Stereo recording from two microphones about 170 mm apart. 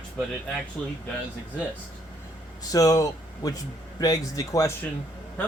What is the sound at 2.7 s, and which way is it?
Speech, 20° left (ahead or behind).